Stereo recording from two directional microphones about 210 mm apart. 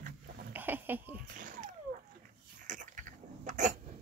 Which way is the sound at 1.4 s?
40° right (ahead or behind).